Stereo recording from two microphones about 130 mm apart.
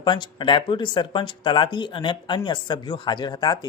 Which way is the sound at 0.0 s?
35° left (ahead or behind).